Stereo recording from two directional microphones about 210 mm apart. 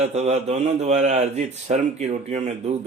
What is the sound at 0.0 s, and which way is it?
Speech, 30° right (ahead or behind).